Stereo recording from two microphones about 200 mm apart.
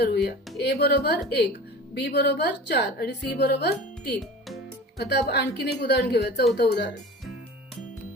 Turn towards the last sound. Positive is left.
turn(degrees=55)  # may be behind; listen again after turning